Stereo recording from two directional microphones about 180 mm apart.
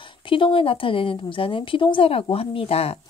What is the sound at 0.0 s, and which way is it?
Speech, 30° left (ahead or behind).